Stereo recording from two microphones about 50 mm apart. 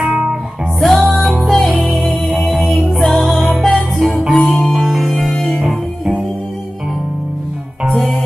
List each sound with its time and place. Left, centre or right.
0.0 s music: centre
0.7 s music: centre
7.9 s music: centre